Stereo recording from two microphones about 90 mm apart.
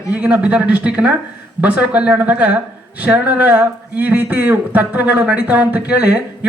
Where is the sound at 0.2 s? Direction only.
15° right (ahead or behind).